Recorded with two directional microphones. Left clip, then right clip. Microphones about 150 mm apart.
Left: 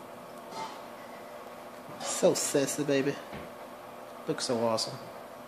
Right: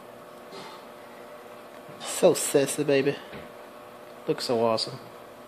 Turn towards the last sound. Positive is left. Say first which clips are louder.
# right 5 dB
turn(degrees=-30)  # may be behind; listen again after turning